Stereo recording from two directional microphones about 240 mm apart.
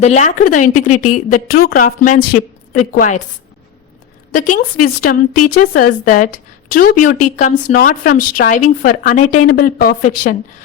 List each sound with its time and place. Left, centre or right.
0.0 s a woman's voice: left
4.3 s a woman's voice: left